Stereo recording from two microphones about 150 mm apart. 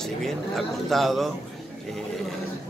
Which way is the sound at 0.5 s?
Centre (ahead or behind).